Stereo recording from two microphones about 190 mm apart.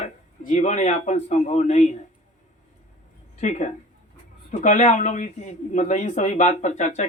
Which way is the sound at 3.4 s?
40° left (ahead or behind).